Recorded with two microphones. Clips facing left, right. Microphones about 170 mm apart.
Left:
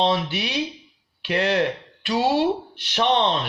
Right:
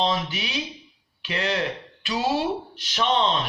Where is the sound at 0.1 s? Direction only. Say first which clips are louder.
Left 4 dB; 65° left (ahead or behind).